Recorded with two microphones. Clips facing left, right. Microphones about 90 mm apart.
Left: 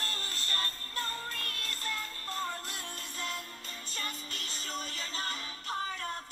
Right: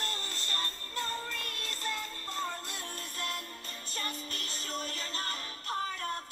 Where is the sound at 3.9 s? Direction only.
40° right (ahead or behind).